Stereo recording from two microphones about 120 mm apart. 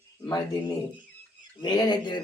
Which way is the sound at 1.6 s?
35° left (ahead or behind).